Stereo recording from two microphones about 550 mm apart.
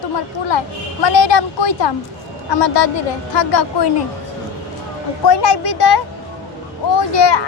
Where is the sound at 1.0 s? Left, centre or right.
Left.